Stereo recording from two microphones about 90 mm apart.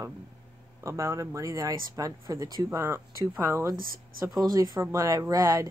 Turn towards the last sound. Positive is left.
turn(degrees=-35)  # may be behind; listen again after turning